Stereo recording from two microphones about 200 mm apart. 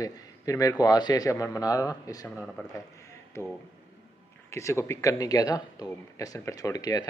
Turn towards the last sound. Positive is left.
turn(degrees=20)  # may be behind; listen again after turning